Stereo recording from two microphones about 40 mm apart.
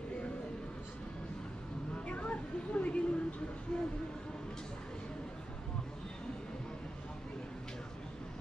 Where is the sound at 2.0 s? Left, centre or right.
Left.